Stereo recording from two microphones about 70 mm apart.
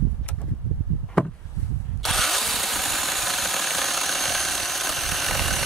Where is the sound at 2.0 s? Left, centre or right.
Centre.